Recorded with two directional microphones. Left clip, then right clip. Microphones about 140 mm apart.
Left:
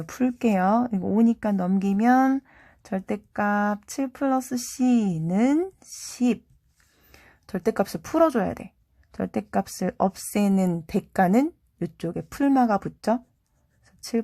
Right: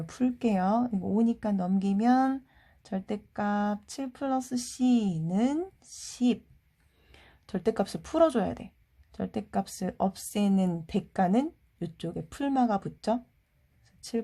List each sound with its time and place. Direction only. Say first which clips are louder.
0.0 s speech: left 5 dB; 20° left (ahead or behind)
7.1 s a sound: left 4 dB; 15° left (ahead or behind)
7.9 s a woman's voice: left 3 dB; 20° left (ahead or behind)